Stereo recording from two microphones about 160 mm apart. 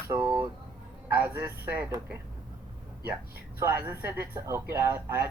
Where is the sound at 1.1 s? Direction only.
15° right (ahead or behind).